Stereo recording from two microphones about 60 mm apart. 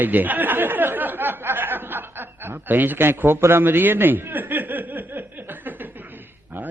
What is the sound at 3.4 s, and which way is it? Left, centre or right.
Chuckle, right.